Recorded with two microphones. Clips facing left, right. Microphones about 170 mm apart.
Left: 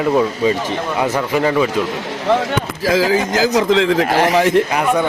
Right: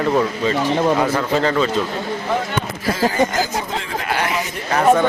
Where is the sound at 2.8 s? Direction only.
90° left.